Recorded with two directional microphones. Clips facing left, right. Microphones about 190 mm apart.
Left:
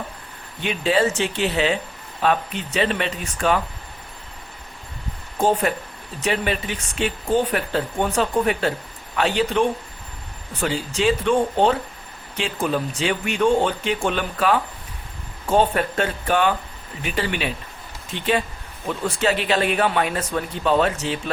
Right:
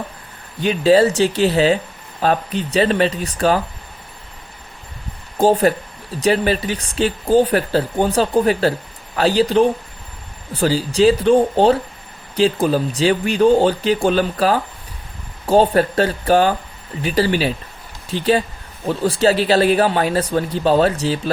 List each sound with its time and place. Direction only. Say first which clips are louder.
0.6 s speech: right 7 dB; 35° right (ahead or behind)
5.4 s speech: right 6 dB; 35° right (ahead or behind)